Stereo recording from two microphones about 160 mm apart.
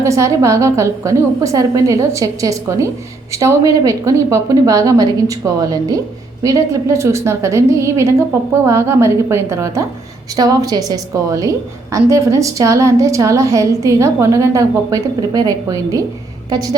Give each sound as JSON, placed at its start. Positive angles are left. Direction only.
{"t": 0.0, "sound": "a woman's voice", "side_deg": -20}